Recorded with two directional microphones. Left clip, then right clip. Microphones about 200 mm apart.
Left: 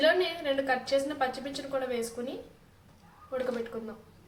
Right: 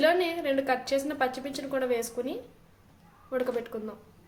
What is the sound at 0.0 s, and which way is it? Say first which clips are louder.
A woman's voice: right 1 dB; 50° right (ahead or behind).